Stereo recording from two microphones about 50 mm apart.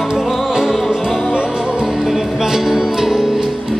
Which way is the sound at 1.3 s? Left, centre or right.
Centre.